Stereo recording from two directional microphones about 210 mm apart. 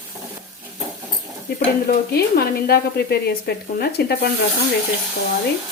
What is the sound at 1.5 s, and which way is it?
Speech, 50° left (ahead or behind).